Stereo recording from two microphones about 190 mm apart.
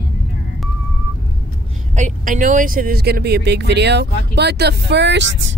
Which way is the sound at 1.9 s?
40° right (ahead or behind).